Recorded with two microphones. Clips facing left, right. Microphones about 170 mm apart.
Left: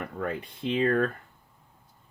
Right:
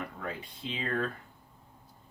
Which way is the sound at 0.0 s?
55° left (ahead or behind).